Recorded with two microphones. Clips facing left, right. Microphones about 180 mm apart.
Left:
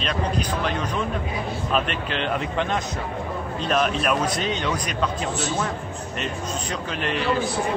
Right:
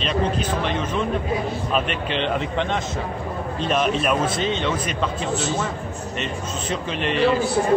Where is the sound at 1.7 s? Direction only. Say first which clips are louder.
Even; centre (ahead or behind).